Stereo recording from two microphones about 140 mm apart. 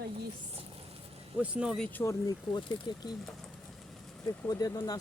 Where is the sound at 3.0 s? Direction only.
30° left (ahead or behind).